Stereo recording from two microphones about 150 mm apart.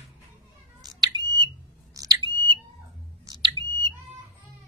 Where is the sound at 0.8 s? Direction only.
25° right (ahead or behind).